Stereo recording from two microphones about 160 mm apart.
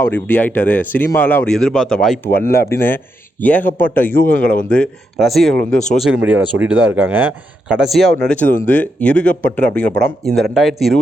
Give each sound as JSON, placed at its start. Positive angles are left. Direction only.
{"t": 0.0, "sound": "speech", "side_deg": 10}
{"t": 2.4, "sound": "speech", "side_deg": 70}
{"t": 2.6, "sound": "a man's voice", "side_deg": 15}